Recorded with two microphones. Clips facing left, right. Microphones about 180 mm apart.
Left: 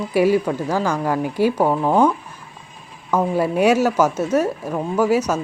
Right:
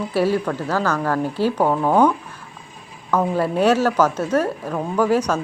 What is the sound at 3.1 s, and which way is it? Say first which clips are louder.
Speech: left 1 dB; 10° left (ahead or behind).